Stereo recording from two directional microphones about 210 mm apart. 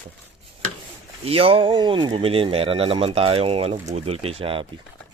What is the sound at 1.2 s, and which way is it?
Speech, 25° right (ahead or behind).